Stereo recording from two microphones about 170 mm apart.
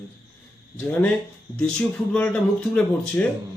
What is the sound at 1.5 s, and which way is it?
Speech, 5° left (ahead or behind).